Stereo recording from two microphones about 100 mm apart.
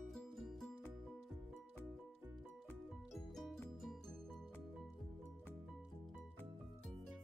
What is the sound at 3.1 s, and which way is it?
Music, centre (ahead or behind).